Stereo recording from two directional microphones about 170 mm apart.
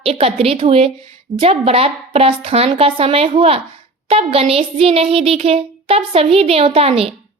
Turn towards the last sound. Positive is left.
turn(degrees=-35)  # may be behind; listen again after turning